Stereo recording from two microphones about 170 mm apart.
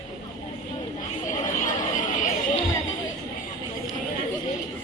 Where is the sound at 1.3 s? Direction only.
50° left (ahead or behind).